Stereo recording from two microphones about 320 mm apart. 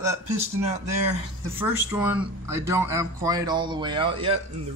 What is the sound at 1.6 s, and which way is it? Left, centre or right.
Speech, centre.